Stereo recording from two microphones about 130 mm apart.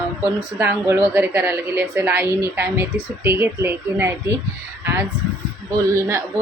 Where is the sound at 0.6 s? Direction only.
20° right (ahead or behind).